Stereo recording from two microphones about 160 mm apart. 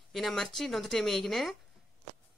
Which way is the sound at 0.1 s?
Centre (ahead or behind).